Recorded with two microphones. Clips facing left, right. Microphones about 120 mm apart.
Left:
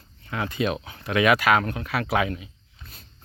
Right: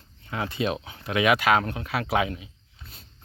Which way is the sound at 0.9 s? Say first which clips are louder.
Left 2 dB; 20° right (ahead or behind).